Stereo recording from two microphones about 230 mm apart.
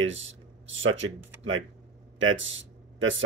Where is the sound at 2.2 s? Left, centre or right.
Right.